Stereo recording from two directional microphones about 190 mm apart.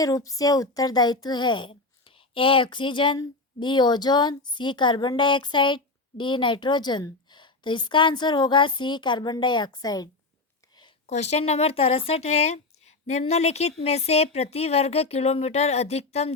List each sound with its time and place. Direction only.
0.0 s a child's voice: 20° left (ahead or behind)
11.0 s speech: 35° left (ahead or behind)